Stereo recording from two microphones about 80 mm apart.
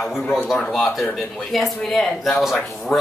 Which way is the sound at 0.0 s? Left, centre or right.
Centre.